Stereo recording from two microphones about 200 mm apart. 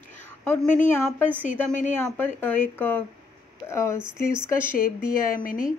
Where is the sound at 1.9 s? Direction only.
10° left (ahead or behind).